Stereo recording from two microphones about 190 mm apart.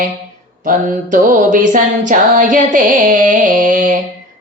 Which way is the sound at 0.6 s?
45° right (ahead or behind).